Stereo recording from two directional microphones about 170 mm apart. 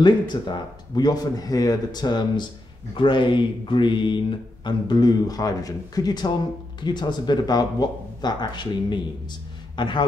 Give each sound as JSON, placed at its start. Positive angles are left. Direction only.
{"t": 0.0, "sound": "a man's voice", "side_deg": 25}